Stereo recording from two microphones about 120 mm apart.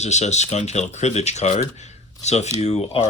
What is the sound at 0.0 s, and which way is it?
Speech, 70° left (ahead or behind).